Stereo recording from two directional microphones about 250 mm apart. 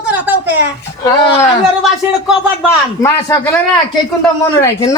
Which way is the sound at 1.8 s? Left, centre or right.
Centre.